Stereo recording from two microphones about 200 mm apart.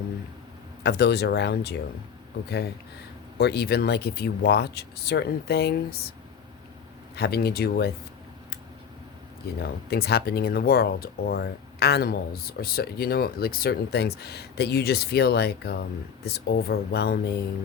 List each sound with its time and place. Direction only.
0.8 s speech: 55° left (ahead or behind)
3.3 s speech: 55° left (ahead or behind)
7.2 s speech: 50° left (ahead or behind)
9.6 s speech: 50° left (ahead or behind)